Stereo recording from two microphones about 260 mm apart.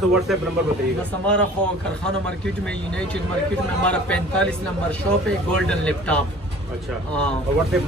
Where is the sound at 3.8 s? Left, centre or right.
Centre.